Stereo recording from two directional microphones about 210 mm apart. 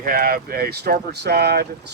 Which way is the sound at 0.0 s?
40° right (ahead or behind).